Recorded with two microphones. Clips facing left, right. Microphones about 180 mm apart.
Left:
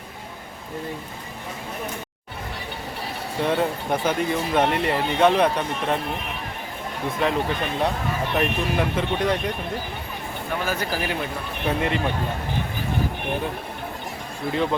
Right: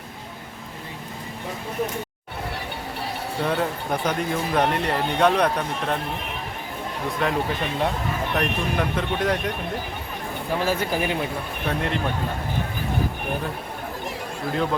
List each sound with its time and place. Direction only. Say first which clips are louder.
3.4 s speech: left 2 dB; centre (ahead or behind)
7.2 s speech: left 2 dB; centre (ahead or behind)
8.4 s speech: left 2 dB; 5° left (ahead or behind)
10.7 s speech: right 2 dB; 25° right (ahead or behind)
11.7 s speech: left 2 dB; centre (ahead or behind)
14.5 s speech: left 1 dB; centre (ahead or behind)